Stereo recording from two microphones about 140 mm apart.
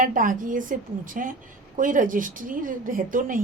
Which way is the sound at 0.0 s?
75° right (ahead or behind).